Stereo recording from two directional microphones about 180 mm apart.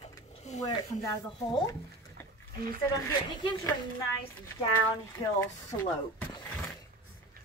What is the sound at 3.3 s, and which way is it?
Speech, 25° left (ahead or behind).